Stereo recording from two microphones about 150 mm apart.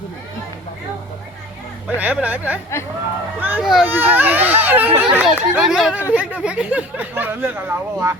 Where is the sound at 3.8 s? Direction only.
15° right (ahead or behind).